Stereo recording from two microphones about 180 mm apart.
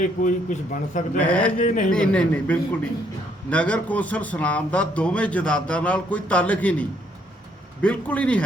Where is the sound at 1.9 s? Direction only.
5° left (ahead or behind).